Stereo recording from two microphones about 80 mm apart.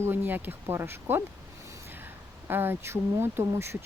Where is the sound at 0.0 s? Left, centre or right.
Right.